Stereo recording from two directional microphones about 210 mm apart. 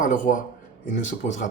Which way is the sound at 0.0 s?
40° left (ahead or behind).